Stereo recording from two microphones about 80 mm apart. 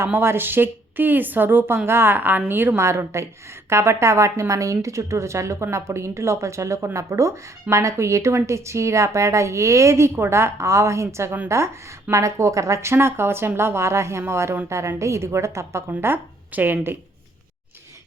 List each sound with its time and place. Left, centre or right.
0.0 s a woman's voice: right
15.9 s a woman's voice: right